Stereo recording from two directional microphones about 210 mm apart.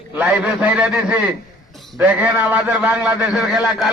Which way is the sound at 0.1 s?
5° right (ahead or behind).